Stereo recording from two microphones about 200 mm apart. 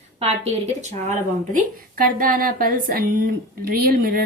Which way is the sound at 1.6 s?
45° right (ahead or behind).